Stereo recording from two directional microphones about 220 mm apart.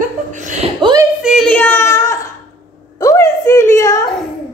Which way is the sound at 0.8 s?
20° right (ahead or behind).